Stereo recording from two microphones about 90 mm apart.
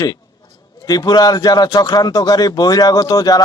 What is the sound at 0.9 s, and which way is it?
Speech, 45° left (ahead or behind).